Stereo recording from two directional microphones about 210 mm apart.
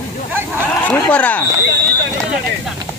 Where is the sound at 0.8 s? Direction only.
5° left (ahead or behind).